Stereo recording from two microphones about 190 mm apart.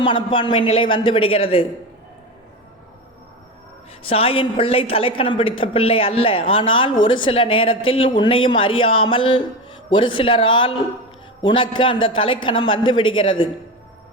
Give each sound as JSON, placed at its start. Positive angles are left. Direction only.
{"t": 0.0, "sound": "a woman's voice", "side_deg": 25}
{"t": 4.0, "sound": "a woman's voice", "side_deg": 30}